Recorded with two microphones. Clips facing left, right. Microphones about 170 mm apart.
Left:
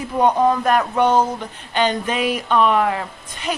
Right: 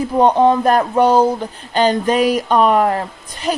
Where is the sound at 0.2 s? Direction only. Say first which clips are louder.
Right 4 dB; 30° right (ahead or behind).